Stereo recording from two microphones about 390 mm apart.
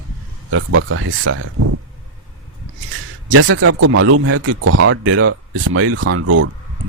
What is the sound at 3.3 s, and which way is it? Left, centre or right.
Speech, right.